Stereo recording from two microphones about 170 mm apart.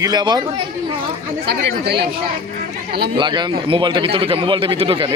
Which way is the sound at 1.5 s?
75° right (ahead or behind).